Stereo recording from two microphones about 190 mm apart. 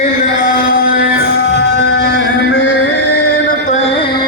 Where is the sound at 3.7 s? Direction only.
35° left (ahead or behind).